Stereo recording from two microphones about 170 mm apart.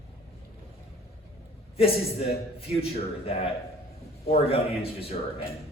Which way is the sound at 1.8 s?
35° left (ahead or behind).